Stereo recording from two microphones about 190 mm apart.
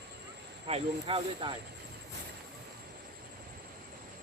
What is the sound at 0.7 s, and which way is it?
Speech, 30° right (ahead or behind).